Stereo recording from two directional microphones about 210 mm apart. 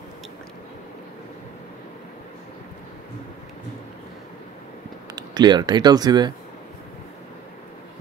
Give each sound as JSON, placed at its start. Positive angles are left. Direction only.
{"t": 5.1, "sound": "speech", "side_deg": -20}